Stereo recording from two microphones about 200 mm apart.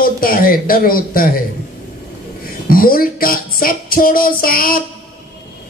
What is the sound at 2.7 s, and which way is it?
A man's voice, 45° left (ahead or behind).